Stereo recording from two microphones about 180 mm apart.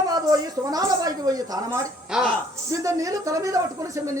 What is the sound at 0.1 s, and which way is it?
Speech, 20° right (ahead or behind).